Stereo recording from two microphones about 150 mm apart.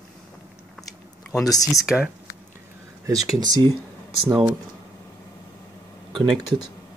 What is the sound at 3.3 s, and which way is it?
Speech, 25° right (ahead or behind).